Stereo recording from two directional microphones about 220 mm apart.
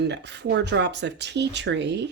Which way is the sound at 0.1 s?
50° right (ahead or behind).